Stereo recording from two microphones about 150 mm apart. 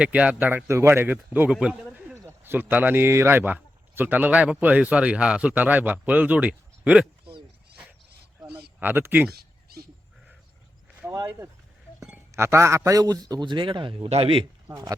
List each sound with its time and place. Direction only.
0.0 s a man's voice: 10° right (ahead or behind)
8.8 s a man's voice: 15° right (ahead or behind)
9.3 s a sound: 90° right
11.1 s a man's voice: 30° right (ahead or behind)
12.3 s a man's voice: 15° right (ahead or behind); by 14.4 s 40° right (ahead or behind)
14.7 s a man's voice: 20° right (ahead or behind)